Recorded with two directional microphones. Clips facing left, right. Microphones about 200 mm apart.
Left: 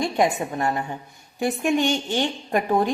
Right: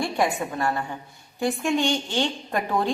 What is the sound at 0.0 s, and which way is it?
A woman's voice, 20° left (ahead or behind).